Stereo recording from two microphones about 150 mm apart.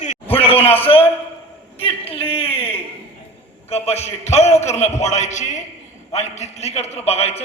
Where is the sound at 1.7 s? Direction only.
40° left (ahead or behind).